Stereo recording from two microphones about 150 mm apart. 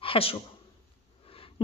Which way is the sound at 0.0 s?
40° left (ahead or behind).